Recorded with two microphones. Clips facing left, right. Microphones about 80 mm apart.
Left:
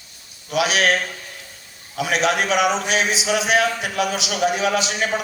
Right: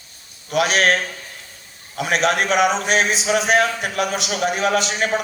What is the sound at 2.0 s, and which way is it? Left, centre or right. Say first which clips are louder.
A man's voice: right 1 dB; right.